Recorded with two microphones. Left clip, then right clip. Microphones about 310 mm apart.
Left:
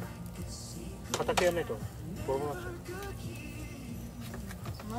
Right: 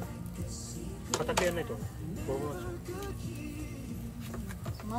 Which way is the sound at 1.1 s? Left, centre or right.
Centre.